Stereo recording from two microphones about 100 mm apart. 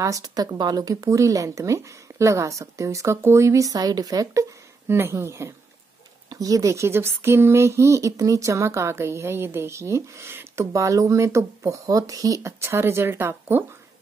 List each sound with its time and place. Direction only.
0.0 s speech: 35° right (ahead or behind)